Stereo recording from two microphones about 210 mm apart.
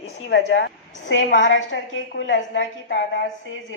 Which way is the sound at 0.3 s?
55° left (ahead or behind).